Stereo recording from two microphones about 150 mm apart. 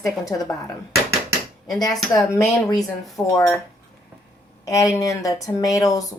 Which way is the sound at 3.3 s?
20° left (ahead or behind).